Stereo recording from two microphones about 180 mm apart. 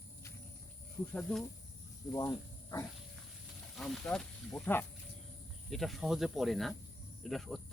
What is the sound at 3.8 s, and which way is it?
Speech, 5° left (ahead or behind).